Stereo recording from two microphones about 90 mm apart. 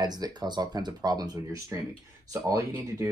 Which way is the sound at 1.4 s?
35° right (ahead or behind).